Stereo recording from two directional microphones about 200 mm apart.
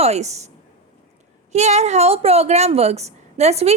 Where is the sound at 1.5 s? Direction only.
35° right (ahead or behind).